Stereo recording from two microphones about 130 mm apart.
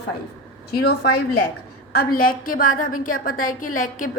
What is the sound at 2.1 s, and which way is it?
A woman's voice, 90° left.